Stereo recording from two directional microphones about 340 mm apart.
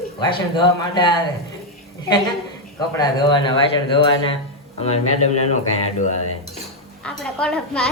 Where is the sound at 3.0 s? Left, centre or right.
Centre.